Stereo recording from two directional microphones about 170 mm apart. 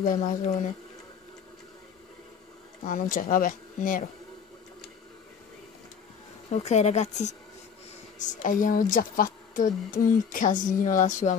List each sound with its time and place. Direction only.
0.0 s a woman's voice: 50° left (ahead or behind)
2.8 s a woman's voice: 50° left (ahead or behind)
6.5 s a woman's voice: 40° left (ahead or behind)